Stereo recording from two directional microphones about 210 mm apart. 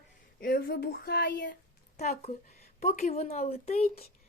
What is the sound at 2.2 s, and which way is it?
A woman's voice, 35° left (ahead or behind).